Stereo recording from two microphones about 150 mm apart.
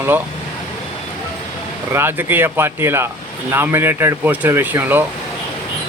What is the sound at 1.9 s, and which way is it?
Speech, 15° right (ahead or behind).